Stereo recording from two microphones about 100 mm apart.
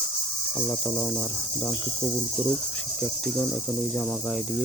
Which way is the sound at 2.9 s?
15° left (ahead or behind).